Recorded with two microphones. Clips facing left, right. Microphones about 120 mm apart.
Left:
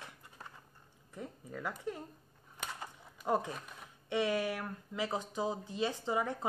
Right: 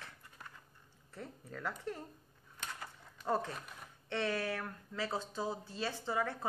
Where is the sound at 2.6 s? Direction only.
15° left (ahead or behind).